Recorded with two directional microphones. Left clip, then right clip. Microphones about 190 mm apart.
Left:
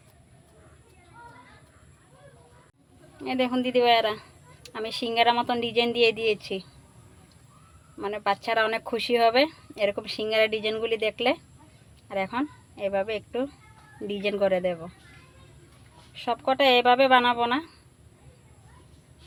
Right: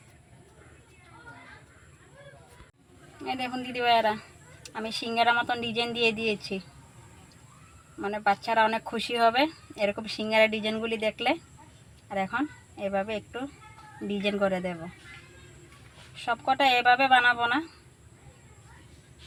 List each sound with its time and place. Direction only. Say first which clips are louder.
3.2 s a woman's voice: left 6 dB; 35° left (ahead or behind)
8.0 s a woman's voice: even; 35° left (ahead or behind)
16.6 s a woman's voice: left 3 dB; 35° left (ahead or behind)